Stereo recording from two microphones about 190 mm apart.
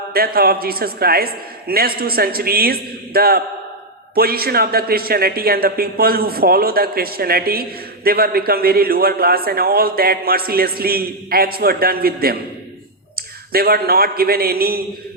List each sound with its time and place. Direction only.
0.1 s a man's voice: 55° right (ahead or behind)